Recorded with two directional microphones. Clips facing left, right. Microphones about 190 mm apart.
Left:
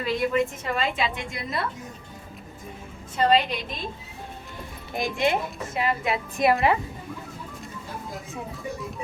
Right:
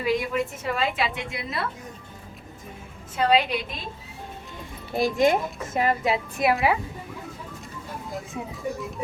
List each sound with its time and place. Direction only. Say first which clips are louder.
0.0 s a woman's voice: left 1 dB; 10° right (ahead or behind)
3.2 s a woman's voice: even; 10° right (ahead or behind)
4.9 s a woman's voice: right 4 dB; 40° right (ahead or behind)
6.3 s a woman's voice: left 3 dB; 5° right (ahead or behind)